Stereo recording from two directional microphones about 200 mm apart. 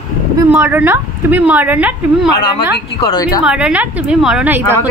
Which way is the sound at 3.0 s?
20° left (ahead or behind).